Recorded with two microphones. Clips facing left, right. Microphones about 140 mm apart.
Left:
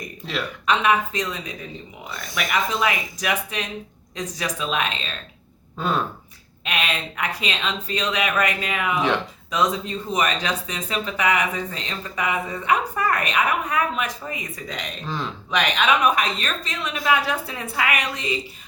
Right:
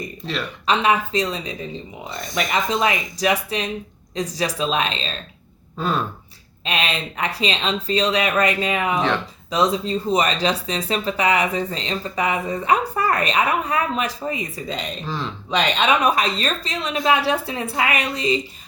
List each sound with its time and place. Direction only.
0.6 s a woman's voice: 30° right (ahead or behind)
5.7 s speech: centre (ahead or behind)
6.7 s speech: 30° right (ahead or behind)
15.0 s speech: centre (ahead or behind)
15.4 s a woman's voice: 25° right (ahead or behind)